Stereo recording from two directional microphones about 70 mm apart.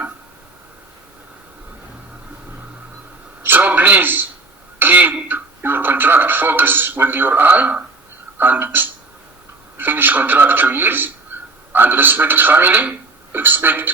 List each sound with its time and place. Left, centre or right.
3.4 s a man's voice: right